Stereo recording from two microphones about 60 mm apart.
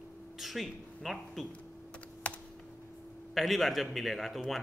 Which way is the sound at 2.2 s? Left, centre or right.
Left.